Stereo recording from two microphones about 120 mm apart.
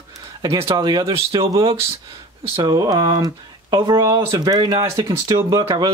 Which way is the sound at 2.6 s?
30° right (ahead or behind).